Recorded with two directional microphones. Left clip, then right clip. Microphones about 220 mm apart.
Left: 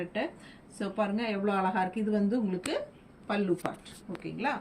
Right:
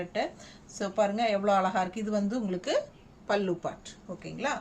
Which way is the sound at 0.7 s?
55° right (ahead or behind).